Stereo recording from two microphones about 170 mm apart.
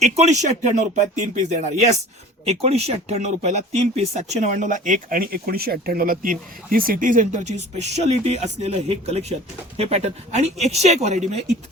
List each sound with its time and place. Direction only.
0.0 s speech: 40° right (ahead or behind)